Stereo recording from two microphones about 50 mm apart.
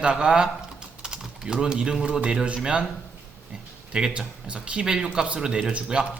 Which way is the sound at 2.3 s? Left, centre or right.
Right.